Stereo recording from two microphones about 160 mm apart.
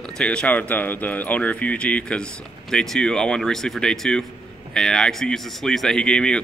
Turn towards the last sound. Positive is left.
turn(degrees=5)  # may be behind; listen again after turning